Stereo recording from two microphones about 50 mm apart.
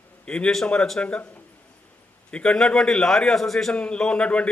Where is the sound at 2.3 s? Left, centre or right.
Centre.